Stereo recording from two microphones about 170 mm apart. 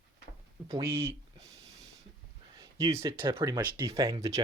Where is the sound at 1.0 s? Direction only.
15° right (ahead or behind).